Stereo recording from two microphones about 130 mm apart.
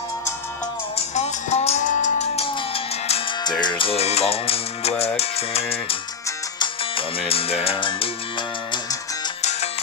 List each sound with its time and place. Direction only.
1.1 s music: 55° left (ahead or behind)
1.9 s music: 70° left (ahead or behind)
2.4 s music: 45° left (ahead or behind)
9.4 s music: 55° left (ahead or behind)